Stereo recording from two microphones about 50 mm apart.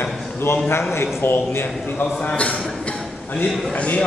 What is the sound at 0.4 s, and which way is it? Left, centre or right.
A man's voice, left.